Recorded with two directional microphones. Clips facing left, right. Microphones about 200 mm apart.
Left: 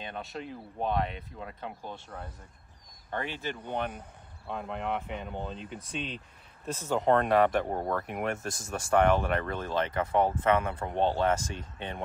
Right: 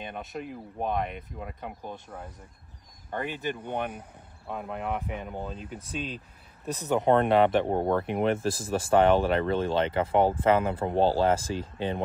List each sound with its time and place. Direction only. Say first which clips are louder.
0.1 s speech: right 2 dB; 15° right (ahead or behind)
3.3 s speech: right 2 dB; 15° right (ahead or behind)
6.7 s speech: right 3 dB; 20° right (ahead or behind)